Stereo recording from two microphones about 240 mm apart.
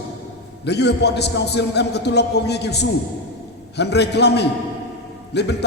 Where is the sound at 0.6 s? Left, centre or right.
Left.